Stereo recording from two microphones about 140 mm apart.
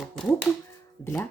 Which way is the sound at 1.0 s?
15° left (ahead or behind).